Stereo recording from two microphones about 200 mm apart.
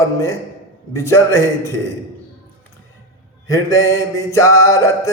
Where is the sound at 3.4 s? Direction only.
15° left (ahead or behind).